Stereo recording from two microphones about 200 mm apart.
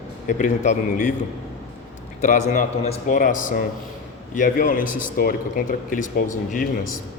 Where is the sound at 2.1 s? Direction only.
35° left (ahead or behind).